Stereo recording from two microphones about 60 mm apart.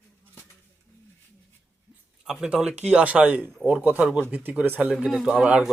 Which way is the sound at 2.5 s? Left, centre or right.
Centre.